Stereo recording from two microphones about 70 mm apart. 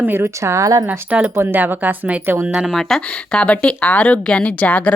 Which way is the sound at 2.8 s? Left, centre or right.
Centre.